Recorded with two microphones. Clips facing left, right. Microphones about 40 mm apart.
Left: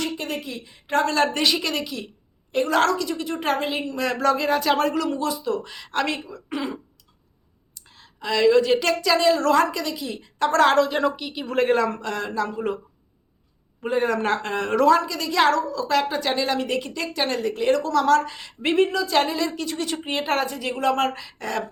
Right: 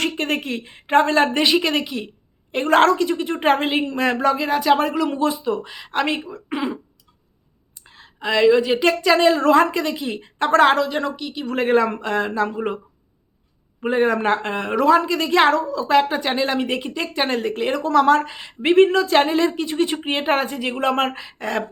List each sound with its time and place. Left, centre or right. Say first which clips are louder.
0.0 s a woman's voice: right 5 dB; right
4.3 s speech: right 1 dB; centre
5.0 s a woman's voice: right 4 dB; right
7.9 s a woman's voice: right 4 dB; right
10.8 s a woman's voice: left 1 dB; centre
11.6 s a woman's voice: right 3 dB; centre
13.8 s a woman's voice: right 4 dB; right
15.0 s a woman's voice: right 4 dB; right
18.8 s a woman's voice: right 6 dB; right
19.2 s a woman's voice: right 6 dB; right